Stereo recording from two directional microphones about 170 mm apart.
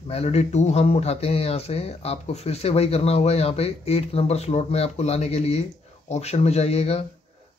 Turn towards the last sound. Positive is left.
turn(degrees=40)  # may be behind; listen again after turning